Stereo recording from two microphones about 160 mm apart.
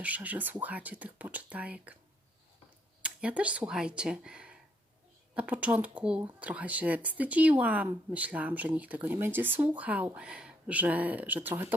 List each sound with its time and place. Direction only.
0.0 s speech: 10° right (ahead or behind)
3.0 s speech: 10° right (ahead or behind)